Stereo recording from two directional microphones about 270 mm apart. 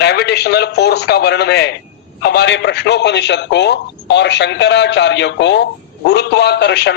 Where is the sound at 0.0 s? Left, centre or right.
Left.